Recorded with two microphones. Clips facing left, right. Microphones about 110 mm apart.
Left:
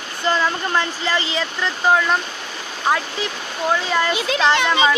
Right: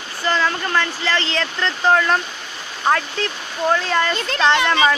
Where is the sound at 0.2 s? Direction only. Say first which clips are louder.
Even; 15° left (ahead or behind).